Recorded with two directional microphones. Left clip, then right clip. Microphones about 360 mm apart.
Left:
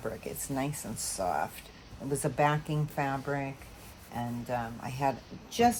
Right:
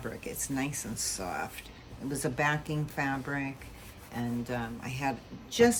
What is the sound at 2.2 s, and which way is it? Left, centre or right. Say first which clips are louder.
A woman's voice: left 1 dB; centre.